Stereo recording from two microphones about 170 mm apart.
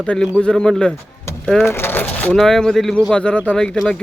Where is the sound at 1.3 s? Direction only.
15° left (ahead or behind).